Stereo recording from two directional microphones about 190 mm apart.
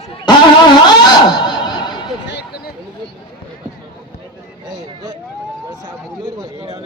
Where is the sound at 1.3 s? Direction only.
25° left (ahead or behind).